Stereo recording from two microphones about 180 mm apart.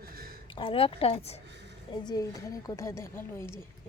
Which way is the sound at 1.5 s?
75° right (ahead or behind).